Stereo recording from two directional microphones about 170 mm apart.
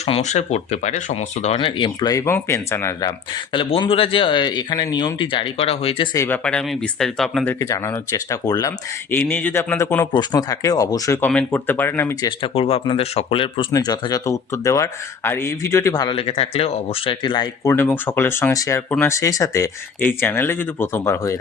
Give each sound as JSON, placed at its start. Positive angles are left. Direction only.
{"t": 0.0, "sound": "speech", "side_deg": 40}
{"t": 3.5, "sound": "speech", "side_deg": 30}
{"t": 6.1, "sound": "speech", "side_deg": 10}
{"t": 7.6, "sound": "speech", "side_deg": 20}
{"t": 12.4, "sound": "speech", "side_deg": 35}
{"t": 13.7, "sound": "speech", "side_deg": 20}